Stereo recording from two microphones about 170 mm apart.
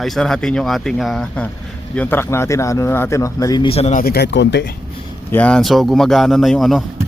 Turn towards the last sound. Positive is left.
turn(degrees=0)  # may be behind; listen again after turning